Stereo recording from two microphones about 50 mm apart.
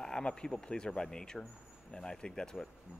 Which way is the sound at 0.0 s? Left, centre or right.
Centre.